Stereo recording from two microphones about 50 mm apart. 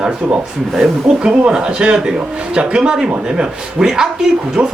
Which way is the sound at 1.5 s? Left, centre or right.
Centre.